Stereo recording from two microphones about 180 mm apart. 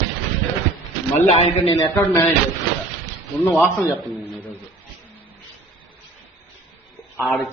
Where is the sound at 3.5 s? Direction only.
10° left (ahead or behind).